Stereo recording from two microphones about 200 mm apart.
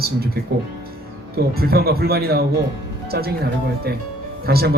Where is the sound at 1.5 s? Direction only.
50° right (ahead or behind).